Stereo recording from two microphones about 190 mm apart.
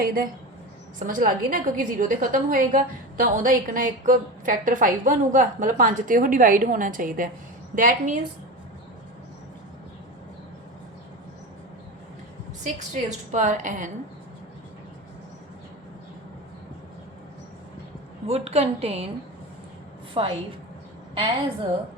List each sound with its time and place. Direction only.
0.0 s a woman's voice: 50° right (ahead or behind)
12.6 s a woman's voice: 40° right (ahead or behind)
18.3 s a woman's voice: 30° right (ahead or behind)
20.2 s a woman's voice: 25° right (ahead or behind)